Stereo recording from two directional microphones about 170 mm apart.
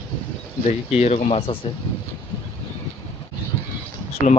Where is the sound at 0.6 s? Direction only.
40° left (ahead or behind).